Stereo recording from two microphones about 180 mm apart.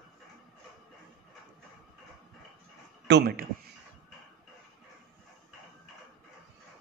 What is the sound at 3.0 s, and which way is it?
Speech, 65° right (ahead or behind).